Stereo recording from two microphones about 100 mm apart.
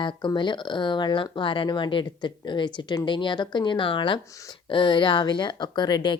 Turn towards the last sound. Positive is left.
turn(degrees=45)  # may be behind; listen again after turning